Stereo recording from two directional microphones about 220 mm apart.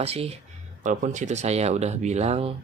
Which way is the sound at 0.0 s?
25° right (ahead or behind).